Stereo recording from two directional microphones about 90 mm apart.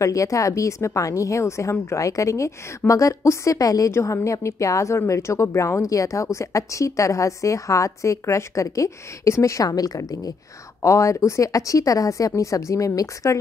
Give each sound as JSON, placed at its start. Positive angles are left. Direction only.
{"t": 0.0, "sound": "a woman's voice", "side_deg": 40}